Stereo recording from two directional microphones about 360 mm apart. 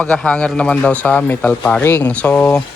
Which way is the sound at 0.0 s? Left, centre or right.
Centre.